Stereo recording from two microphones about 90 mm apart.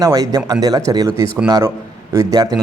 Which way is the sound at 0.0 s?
40° right (ahead or behind).